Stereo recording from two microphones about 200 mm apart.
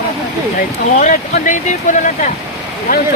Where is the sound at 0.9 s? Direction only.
40° left (ahead or behind).